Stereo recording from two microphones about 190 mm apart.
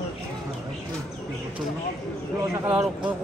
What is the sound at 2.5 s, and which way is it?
Speech, 5° right (ahead or behind).